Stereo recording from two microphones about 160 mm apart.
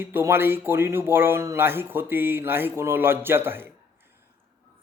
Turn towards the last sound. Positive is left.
turn(degrees=-15)  # may be behind; listen again after turning